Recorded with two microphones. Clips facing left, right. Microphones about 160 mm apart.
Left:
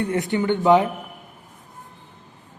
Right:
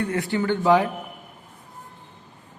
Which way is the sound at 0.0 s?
20° left (ahead or behind).